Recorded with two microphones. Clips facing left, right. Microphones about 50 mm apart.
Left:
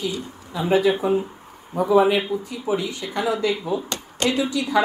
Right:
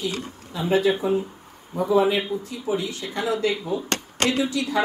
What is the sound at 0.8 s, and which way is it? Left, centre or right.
Speech, centre.